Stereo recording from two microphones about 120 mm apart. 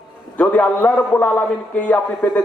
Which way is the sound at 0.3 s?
15° left (ahead or behind).